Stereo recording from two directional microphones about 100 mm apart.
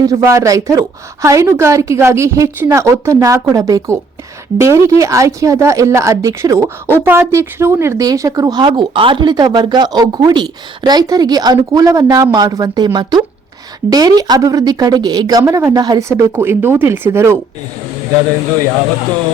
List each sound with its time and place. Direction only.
0.0 s a woman's voice: 30° right (ahead or behind)
7.0 s a woman's voice: 20° right (ahead or behind); by 9.3 s 60° right (ahead or behind)
9.3 s a woman's voice: 45° right (ahead or behind)
16.3 s speech: 20° right (ahead or behind)